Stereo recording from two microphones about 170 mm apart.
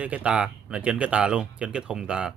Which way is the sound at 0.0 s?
5° right (ahead or behind).